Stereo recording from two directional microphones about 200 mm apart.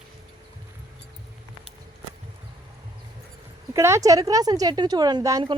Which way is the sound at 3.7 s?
15° right (ahead or behind).